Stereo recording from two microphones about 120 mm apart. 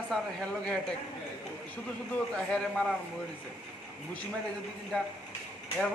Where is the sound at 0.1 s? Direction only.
5° left (ahead or behind).